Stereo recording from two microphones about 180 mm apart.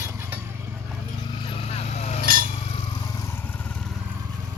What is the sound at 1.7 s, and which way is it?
Vehicle, 35° left (ahead or behind).